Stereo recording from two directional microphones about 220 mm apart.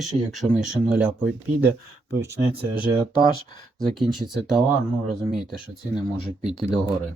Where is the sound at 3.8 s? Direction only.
Centre (ahead or behind).